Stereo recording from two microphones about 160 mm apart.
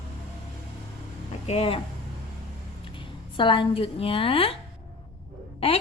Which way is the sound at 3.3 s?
30° left (ahead or behind).